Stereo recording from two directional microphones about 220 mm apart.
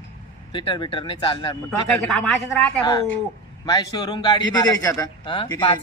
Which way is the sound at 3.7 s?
15° left (ahead or behind).